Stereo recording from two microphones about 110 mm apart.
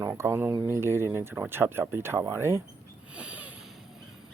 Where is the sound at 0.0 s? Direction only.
25° right (ahead or behind).